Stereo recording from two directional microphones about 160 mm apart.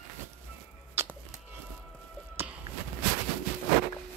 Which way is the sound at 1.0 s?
15° right (ahead or behind).